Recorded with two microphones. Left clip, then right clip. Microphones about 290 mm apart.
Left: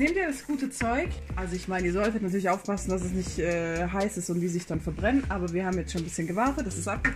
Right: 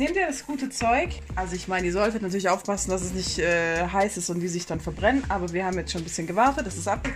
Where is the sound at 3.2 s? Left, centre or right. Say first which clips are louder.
Right 5 dB; right.